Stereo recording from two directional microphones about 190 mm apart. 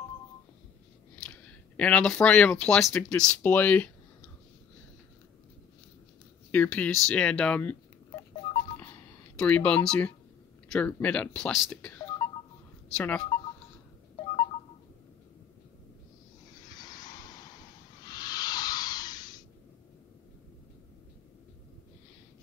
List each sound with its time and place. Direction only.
1.2 s speech: 5° left (ahead or behind)
6.5 s speech: 10° left (ahead or behind)
9.4 s speech: 5° left (ahead or behind)
12.2 s telephone dialing: 15° left (ahead or behind)
12.9 s speech: 10° left (ahead or behind)
16.6 s a sound: 20° left (ahead or behind)